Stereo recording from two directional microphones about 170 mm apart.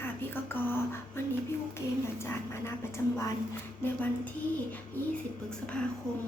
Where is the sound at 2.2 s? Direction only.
15° left (ahead or behind).